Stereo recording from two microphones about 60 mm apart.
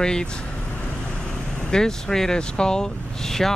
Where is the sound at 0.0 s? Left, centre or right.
Centre.